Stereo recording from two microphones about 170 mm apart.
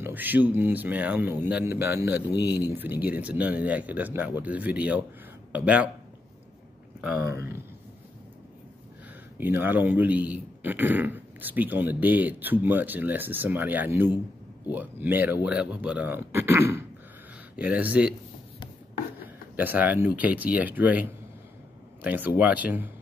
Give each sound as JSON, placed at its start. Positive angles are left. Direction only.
{"t": 0.0, "sound": "a man's voice", "side_deg": -10}
{"t": 2.3, "sound": "speech", "side_deg": 25}
{"t": 2.6, "sound": "a man's voice", "side_deg": -10}
{"t": 7.0, "sound": "a man's voice", "side_deg": -10}
{"t": 9.4, "sound": "a man's voice", "side_deg": -10}
{"t": 19.5, "sound": "a man's voice", "side_deg": -10}